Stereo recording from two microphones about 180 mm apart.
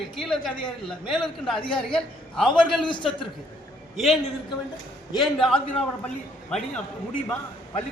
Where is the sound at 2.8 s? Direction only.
25° left (ahead or behind).